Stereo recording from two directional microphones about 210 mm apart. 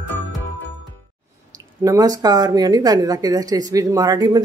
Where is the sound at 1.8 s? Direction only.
15° right (ahead or behind).